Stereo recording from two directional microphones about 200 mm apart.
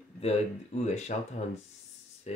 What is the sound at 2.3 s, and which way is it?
Speech, 35° left (ahead or behind).